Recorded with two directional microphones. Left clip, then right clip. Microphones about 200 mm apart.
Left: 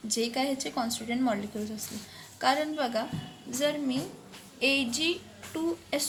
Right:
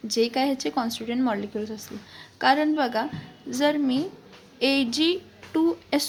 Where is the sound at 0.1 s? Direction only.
40° right (ahead or behind).